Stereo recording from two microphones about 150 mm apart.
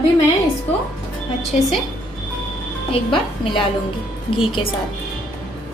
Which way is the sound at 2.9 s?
35° left (ahead or behind).